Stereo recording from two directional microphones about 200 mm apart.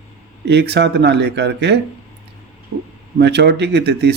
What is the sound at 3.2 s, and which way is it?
Speech, 55° right (ahead or behind).